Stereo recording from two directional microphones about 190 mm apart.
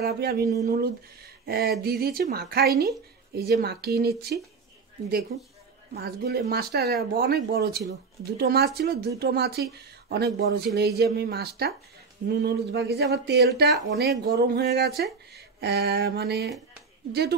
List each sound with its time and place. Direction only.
0.0 s speech: 55° right (ahead or behind)
5.3 s speech: 60° right (ahead or behind)